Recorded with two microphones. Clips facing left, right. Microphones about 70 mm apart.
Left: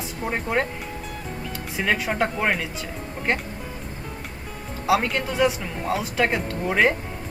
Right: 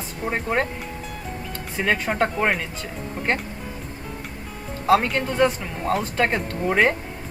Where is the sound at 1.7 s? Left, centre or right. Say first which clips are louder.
Right 1 dB; centre.